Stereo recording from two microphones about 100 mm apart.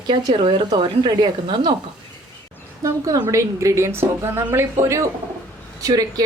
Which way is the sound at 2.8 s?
40° right (ahead or behind).